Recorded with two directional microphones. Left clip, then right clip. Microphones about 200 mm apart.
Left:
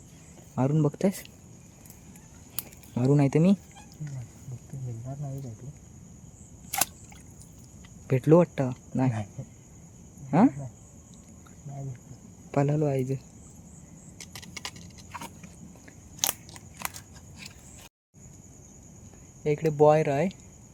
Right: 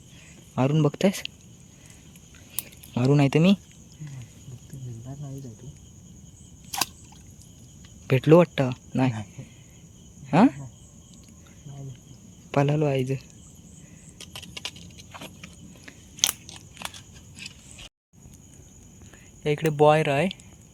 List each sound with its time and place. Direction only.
0.5 s speech: centre (ahead or behind)
2.9 s speech: centre (ahead or behind)
8.0 s speech: centre (ahead or behind)
10.2 s speech: centre (ahead or behind)
12.5 s speech: centre (ahead or behind)
16.2 s scissors: 25° left (ahead or behind)
19.4 s speech: 5° right (ahead or behind)